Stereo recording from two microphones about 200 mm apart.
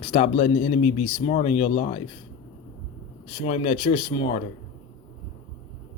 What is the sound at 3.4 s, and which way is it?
Speech, 30° left (ahead or behind).